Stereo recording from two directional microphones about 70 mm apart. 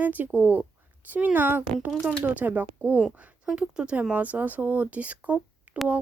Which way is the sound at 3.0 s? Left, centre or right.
Centre.